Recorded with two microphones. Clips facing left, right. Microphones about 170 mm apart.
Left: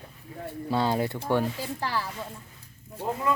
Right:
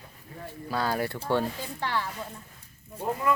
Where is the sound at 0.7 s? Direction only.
20° left (ahead or behind).